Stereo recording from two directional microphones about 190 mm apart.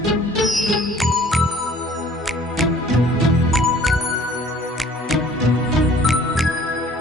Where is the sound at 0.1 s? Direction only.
Centre (ahead or behind).